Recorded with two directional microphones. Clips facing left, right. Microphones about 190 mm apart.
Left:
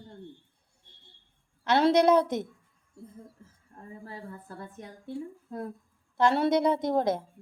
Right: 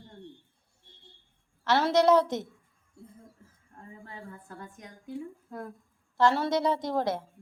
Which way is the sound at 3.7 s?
35° left (ahead or behind).